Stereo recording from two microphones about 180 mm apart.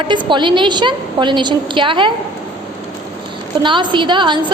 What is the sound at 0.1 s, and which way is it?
A woman's voice, 25° right (ahead or behind).